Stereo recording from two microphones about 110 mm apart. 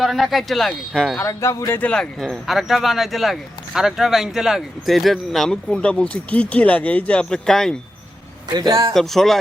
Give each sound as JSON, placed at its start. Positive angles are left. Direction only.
{"t": 0.0, "sound": "speech", "side_deg": 0}
{"t": 1.2, "sound": "speech", "side_deg": 25}
{"t": 1.8, "sound": "speech", "side_deg": 5}
{"t": 8.4, "sound": "speech", "side_deg": -40}
{"t": 8.9, "sound": "speech", "side_deg": 0}